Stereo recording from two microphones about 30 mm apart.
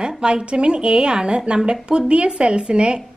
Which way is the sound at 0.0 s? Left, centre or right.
Right.